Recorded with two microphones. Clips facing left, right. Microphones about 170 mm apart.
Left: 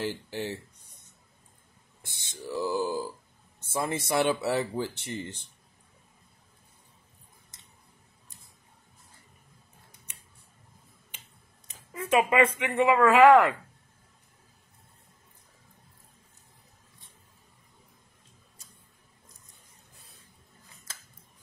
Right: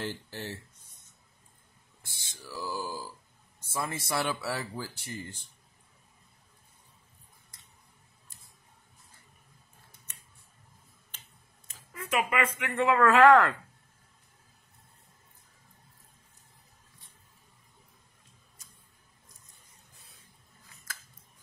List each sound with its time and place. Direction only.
0.0 s speech: 15° left (ahead or behind)
2.0 s speech: 20° left (ahead or behind)
7.5 s a sound: 20° left (ahead or behind)
11.6 s speech: 20° left (ahead or behind)